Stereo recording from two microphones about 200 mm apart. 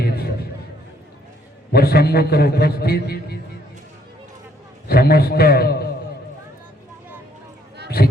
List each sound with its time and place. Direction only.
0.0 s music: 50° left (ahead or behind)
1.7 s a man's voice: 50° left (ahead or behind)
4.9 s a man's voice: 50° left (ahead or behind)
7.9 s a sound: 50° left (ahead or behind)